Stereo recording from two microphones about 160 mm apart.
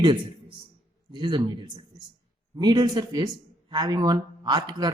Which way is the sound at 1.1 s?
30° right (ahead or behind).